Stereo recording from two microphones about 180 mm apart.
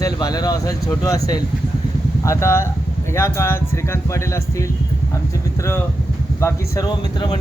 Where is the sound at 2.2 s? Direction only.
15° left (ahead or behind).